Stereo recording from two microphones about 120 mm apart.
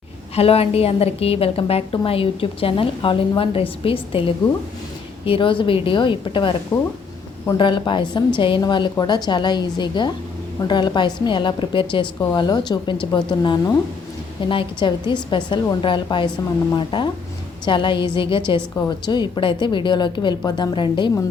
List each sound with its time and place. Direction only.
0.3 s a woman's voice: 55° left (ahead or behind)
6.7 s speech: 25° left (ahead or behind)
7.5 s a woman's voice: 40° left (ahead or behind)